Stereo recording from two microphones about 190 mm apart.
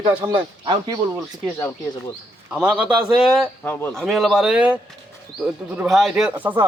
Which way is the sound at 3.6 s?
10° left (ahead or behind).